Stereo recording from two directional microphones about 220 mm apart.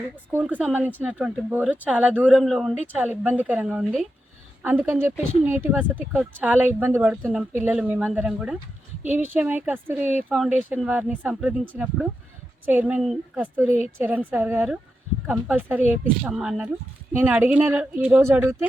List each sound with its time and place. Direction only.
0.3 s speech: 5° right (ahead or behind)
12.6 s speech: 5° right (ahead or behind)